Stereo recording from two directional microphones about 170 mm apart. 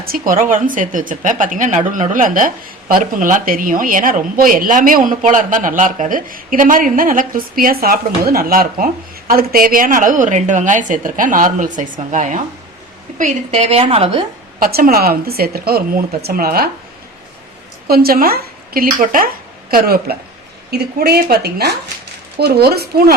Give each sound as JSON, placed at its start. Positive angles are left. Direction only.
{"t": 0.0, "sound": "a woman's voice", "side_deg": -55}
{"t": 14.6, "sound": "speech", "side_deg": -60}
{"t": 17.8, "sound": "a woman's voice", "side_deg": -60}